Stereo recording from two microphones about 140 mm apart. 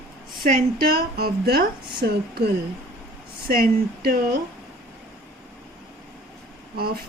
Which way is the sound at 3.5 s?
90° right.